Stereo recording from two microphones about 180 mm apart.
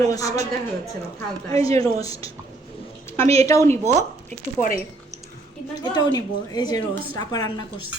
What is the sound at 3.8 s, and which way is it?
Speech, 40° right (ahead or behind).